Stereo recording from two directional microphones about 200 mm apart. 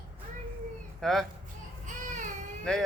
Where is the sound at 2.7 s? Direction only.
5° left (ahead or behind).